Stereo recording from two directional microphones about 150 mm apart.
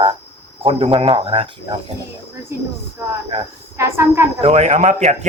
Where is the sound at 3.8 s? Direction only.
15° right (ahead or behind).